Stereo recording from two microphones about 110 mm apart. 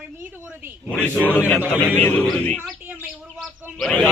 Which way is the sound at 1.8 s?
15° left (ahead or behind).